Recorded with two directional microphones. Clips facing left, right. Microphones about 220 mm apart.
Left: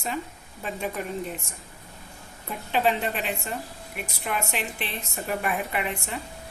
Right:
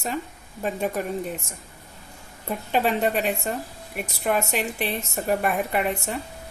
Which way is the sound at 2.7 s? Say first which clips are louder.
Right 3 dB; 45° right (ahead or behind).